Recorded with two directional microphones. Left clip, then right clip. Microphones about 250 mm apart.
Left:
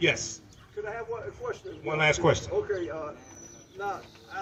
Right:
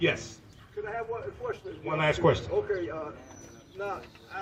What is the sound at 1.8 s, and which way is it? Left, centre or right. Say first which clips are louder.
Speech: left 1 dB; left.